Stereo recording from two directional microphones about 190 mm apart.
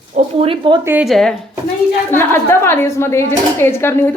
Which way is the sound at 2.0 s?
10° left (ahead or behind).